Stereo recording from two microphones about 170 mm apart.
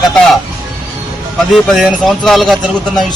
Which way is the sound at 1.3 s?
Centre (ahead or behind).